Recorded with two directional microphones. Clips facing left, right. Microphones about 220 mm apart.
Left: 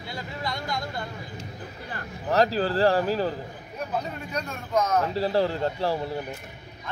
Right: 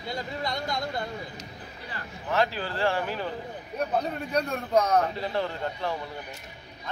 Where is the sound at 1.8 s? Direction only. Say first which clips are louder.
Left 4 dB; 40° left (ahead or behind).